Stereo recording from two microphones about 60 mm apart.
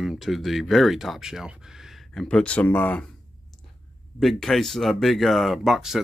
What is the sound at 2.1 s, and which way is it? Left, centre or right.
Speech, centre.